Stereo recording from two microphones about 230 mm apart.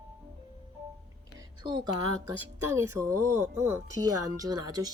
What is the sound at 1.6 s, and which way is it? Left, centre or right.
Speech, centre.